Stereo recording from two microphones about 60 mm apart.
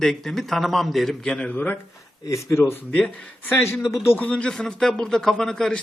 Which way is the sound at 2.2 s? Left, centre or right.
Left.